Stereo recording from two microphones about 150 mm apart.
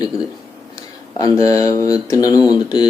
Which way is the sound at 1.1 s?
25° left (ahead or behind).